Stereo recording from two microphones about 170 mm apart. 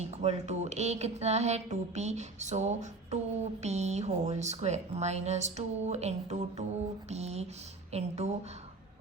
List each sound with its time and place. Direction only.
0.0 s speech: 40° right (ahead or behind)